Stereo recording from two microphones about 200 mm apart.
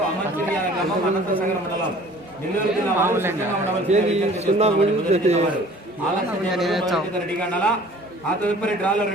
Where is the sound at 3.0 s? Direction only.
10° right (ahead or behind).